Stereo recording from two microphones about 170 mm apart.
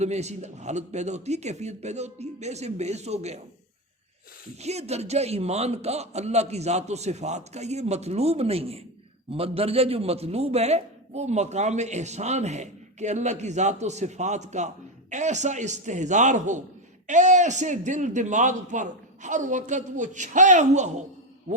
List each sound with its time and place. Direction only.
0.0 s a man's voice: 40° right (ahead or behind)
4.6 s a man's voice: 40° right (ahead or behind)